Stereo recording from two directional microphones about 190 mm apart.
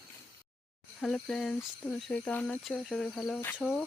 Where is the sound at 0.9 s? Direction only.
Centre (ahead or behind).